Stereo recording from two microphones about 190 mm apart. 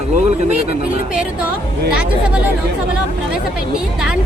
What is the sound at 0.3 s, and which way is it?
Speech, 35° right (ahead or behind).